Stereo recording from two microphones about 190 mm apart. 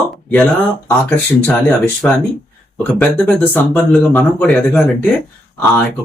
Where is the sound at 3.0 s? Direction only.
10° left (ahead or behind).